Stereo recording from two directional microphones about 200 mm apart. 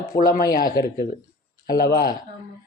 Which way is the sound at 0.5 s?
50° left (ahead or behind).